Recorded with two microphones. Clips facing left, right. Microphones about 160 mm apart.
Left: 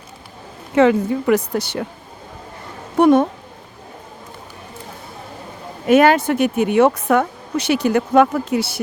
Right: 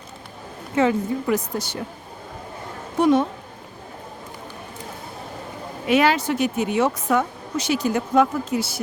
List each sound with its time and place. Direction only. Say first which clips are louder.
0.8 s a woman's voice: left 6 dB; 75° left (ahead or behind)
3.0 s speech: left 5 dB; 55° left (ahead or behind)
5.8 s speech: left 6 dB; 50° left (ahead or behind); by 8.8 s 65° left (ahead or behind)